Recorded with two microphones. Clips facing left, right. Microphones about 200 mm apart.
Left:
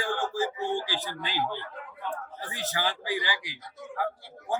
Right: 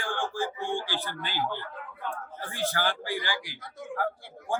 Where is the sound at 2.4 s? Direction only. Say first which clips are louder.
Right 2 dB; 5° left (ahead or behind).